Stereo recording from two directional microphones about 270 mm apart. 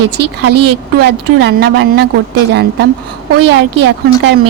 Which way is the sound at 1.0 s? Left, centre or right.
Right.